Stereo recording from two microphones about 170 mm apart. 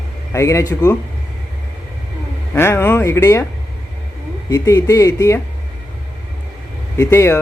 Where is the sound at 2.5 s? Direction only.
15° left (ahead or behind).